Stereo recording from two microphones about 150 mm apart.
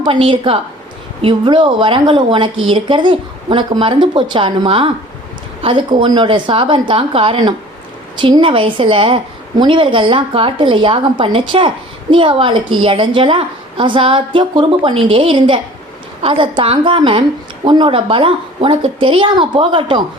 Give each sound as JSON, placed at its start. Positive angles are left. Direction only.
{"t": 0.0, "sound": "speech", "side_deg": -35}